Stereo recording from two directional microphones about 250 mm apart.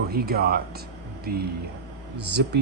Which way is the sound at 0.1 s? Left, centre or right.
Right.